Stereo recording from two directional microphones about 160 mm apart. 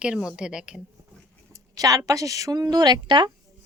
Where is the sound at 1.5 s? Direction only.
20° right (ahead or behind).